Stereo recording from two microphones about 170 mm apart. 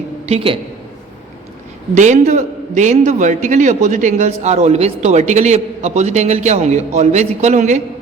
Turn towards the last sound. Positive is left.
turn(degrees=-45)  # may be behind; listen again after turning